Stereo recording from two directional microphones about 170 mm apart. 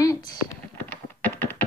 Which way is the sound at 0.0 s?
20° left (ahead or behind).